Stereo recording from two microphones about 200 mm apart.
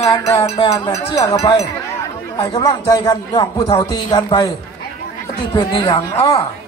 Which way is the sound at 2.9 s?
20° left (ahead or behind).